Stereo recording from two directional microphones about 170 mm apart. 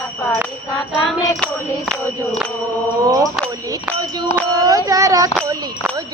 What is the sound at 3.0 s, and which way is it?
Mantra, 20° right (ahead or behind).